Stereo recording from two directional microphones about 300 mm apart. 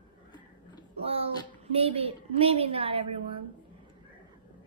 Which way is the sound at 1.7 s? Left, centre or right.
Centre.